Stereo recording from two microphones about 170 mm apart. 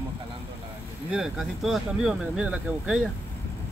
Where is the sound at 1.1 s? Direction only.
Centre (ahead or behind).